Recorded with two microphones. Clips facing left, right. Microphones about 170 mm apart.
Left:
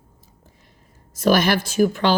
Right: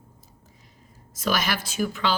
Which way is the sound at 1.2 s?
50° left (ahead or behind).